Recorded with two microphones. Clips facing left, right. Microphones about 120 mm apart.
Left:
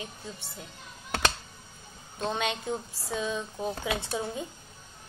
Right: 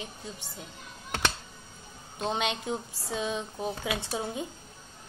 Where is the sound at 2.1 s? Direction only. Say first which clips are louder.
Even; 20° right (ahead or behind).